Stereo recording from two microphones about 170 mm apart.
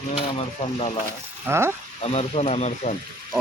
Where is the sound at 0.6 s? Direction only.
35° left (ahead or behind).